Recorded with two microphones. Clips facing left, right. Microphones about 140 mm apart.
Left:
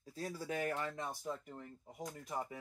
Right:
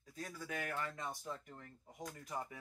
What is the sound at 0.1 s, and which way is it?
Speech, 30° left (ahead or behind).